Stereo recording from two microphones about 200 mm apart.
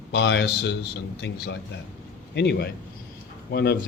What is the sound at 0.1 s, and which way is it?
Speech, 60° left (ahead or behind).